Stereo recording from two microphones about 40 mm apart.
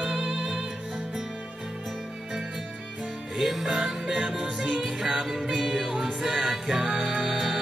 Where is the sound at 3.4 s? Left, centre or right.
Centre.